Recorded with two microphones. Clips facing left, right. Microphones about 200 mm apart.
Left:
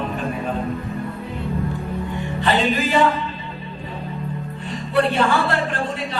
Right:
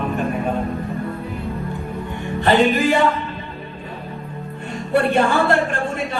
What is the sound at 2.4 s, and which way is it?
Music, 50° right (ahead or behind).